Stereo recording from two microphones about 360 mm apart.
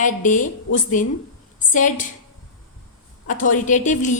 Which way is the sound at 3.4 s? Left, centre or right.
Left.